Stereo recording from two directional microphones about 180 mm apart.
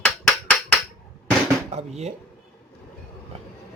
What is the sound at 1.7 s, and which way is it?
Speech, 35° right (ahead or behind).